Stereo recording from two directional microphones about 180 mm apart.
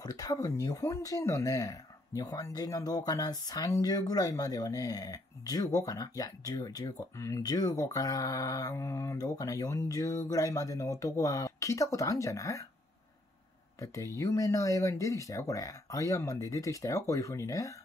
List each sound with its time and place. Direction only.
0.0 s speech: 20° left (ahead or behind)
14.1 s speech: 15° left (ahead or behind)